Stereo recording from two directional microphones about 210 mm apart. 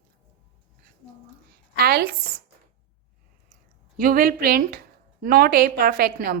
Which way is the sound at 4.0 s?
45° right (ahead or behind).